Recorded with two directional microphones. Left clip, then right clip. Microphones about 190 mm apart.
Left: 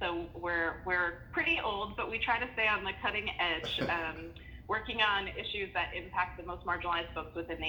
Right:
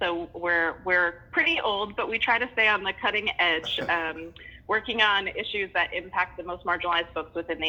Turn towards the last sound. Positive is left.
turn(degrees=-35)  # may be behind; listen again after turning